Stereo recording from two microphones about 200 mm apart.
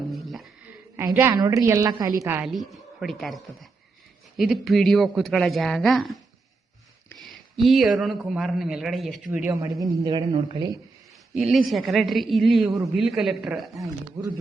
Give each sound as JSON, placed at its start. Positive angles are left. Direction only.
{"t": 0.1, "sound": "a sound", "side_deg": 0}
{"t": 0.9, "sound": "a woman's voice", "side_deg": -10}
{"t": 7.3, "sound": "a man's voice", "side_deg": 0}
{"t": 11.3, "sound": "a man's voice", "side_deg": 0}
{"t": 13.8, "sound": "speech", "side_deg": -15}